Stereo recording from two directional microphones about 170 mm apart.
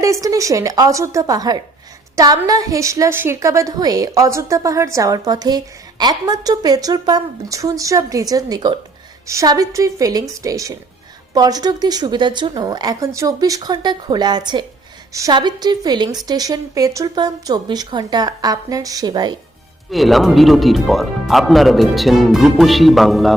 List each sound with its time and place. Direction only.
0.0 s a woman's voice: 20° right (ahead or behind)
19.9 s speech: centre (ahead or behind)